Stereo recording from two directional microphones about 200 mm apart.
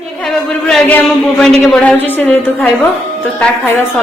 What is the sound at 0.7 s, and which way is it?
A man's voice, 5° left (ahead or behind).